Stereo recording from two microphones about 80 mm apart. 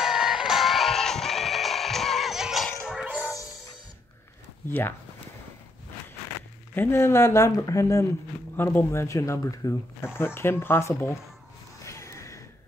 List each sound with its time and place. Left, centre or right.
0.0 s music: centre
4.6 s speech: left
6.7 s speech: left
7.0 s speech: left
8.5 s speech: left
11.8 s a sound: left